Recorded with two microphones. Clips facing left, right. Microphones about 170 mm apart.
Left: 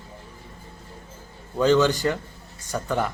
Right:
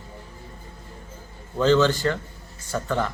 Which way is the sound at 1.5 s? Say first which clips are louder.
Even; 10° left (ahead or behind).